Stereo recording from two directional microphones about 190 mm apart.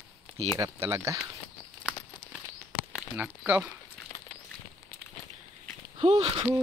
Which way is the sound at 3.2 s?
5° right (ahead or behind).